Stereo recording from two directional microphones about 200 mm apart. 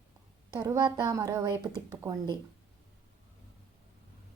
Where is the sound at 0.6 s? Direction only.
15° right (ahead or behind).